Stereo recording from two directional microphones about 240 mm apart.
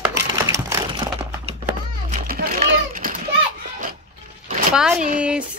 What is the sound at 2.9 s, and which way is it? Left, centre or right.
Children playing, right.